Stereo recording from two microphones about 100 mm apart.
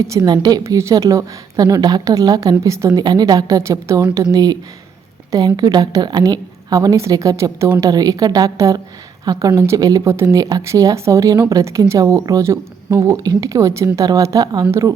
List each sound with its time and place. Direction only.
0.0 s speech: 30° right (ahead or behind)
0.6 s speech: 30° right (ahead or behind)
3.0 s speech: 40° right (ahead or behind)